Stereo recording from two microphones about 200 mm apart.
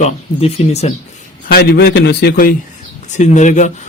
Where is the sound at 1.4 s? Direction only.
55° left (ahead or behind).